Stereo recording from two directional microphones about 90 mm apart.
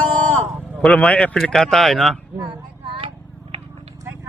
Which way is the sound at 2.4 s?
70° right (ahead or behind).